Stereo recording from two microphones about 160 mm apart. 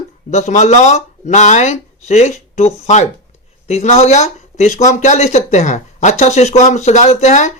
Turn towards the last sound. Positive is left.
turn(degrees=45)  # may be behind; listen again after turning